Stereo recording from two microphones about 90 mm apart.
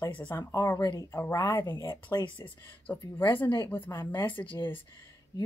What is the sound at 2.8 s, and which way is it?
Speech, 20° left (ahead or behind).